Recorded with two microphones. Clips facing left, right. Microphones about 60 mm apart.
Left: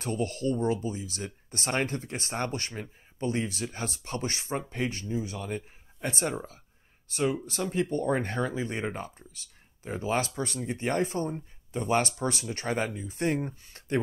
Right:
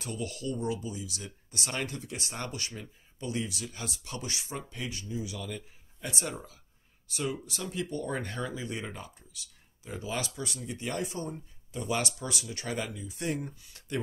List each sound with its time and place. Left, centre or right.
0.0 s speech: left